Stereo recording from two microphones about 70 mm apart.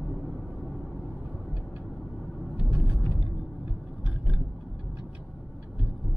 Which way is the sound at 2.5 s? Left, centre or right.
Centre.